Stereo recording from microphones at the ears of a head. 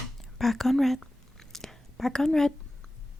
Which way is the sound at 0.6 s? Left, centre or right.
Centre.